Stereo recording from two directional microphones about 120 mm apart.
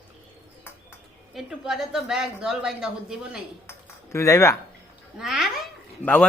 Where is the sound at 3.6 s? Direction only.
25° left (ahead or behind).